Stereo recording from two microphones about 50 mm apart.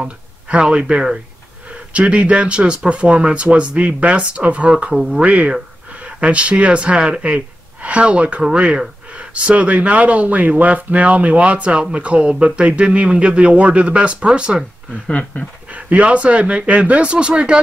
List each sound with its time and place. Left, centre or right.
0.0 s speech: right
15.0 s a sound: left
15.7 s speech: right